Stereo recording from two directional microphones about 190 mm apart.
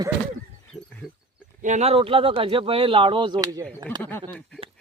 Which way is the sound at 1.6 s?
35° right (ahead or behind).